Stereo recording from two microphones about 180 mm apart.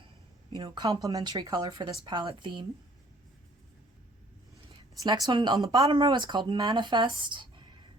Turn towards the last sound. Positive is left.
turn(degrees=-25)  # may be behind; listen again after turning